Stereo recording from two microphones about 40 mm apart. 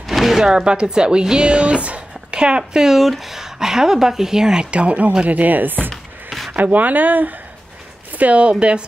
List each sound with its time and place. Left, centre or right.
0.0 s a sound: centre
0.7 s speech: right
2.9 s speech: centre
4.6 s speech: right
8.2 s speech: right